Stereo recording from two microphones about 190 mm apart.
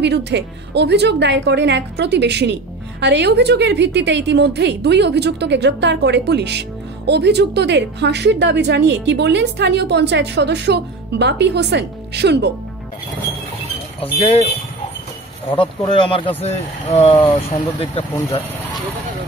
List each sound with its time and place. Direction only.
0.0 s a woman's voice: 65° right (ahead or behind)
14.2 s speech: 35° left (ahead or behind)
15.5 s speech: 25° left (ahead or behind)